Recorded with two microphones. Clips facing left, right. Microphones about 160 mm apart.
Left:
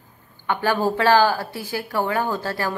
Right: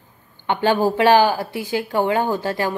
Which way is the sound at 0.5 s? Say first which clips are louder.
Right 3 dB; 20° right (ahead or behind).